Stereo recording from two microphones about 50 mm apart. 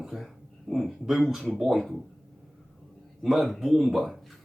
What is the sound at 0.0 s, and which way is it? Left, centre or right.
Speech, centre.